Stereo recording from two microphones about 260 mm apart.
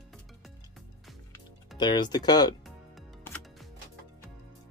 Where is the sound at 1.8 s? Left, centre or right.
Centre.